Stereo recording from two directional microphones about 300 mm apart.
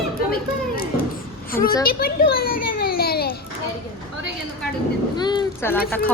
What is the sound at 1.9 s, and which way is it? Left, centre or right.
Children playing, left.